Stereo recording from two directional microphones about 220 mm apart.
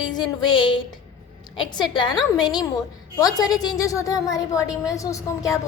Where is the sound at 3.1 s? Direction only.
15° left (ahead or behind).